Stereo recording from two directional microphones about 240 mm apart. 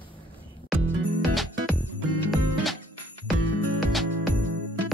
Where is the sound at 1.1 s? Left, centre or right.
Centre.